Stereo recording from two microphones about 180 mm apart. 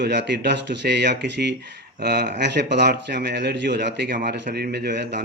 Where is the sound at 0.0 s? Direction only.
70° right (ahead or behind).